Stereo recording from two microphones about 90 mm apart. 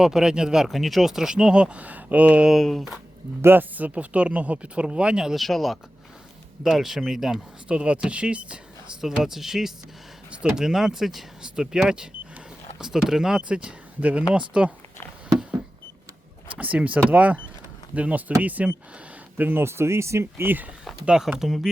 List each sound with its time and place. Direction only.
0.0 s speech: 5° right (ahead or behind)
2.5 s speech: centre (ahead or behind)
3.4 s speech: 20° right (ahead or behind)
16.6 s speech: 15° right (ahead or behind)
21.0 s speech: 10° right (ahead or behind)